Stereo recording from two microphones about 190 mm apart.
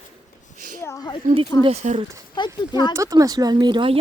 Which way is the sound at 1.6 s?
35° right (ahead or behind).